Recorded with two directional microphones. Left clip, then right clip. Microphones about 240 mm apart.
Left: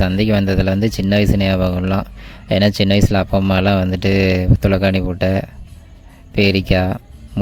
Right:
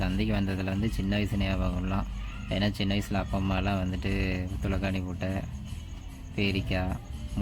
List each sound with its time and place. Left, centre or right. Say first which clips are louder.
0.0 s speech: left 14 dB; left